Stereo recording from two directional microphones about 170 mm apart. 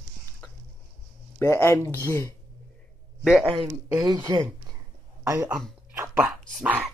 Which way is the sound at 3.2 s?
5° right (ahead or behind).